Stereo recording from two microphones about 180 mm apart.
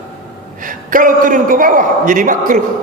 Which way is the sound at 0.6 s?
50° right (ahead or behind).